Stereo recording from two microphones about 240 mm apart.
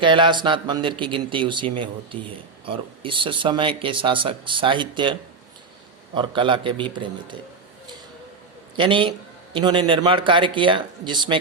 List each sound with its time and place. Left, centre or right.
0.0 s speech: centre
6.1 s speech: centre
8.7 s speech: centre